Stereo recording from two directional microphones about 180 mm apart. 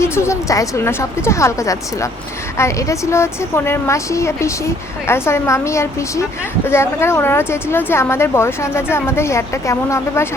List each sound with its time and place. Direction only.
0.0 s a woman's voice: 15° left (ahead or behind)